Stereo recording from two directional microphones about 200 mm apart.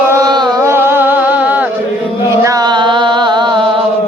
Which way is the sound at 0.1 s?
20° right (ahead or behind).